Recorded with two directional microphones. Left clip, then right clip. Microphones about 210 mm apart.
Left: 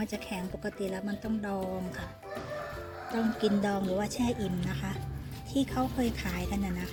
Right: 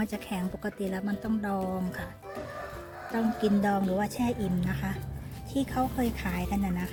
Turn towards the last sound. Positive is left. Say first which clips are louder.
# right 3 dB
turn(degrees=-5)  # may be behind; listen again after turning